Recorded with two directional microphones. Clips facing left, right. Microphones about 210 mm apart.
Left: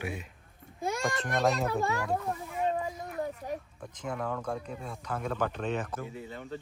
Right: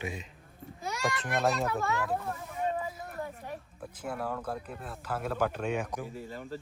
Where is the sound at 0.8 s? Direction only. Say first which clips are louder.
Left 2 dB; 50° left (ahead or behind).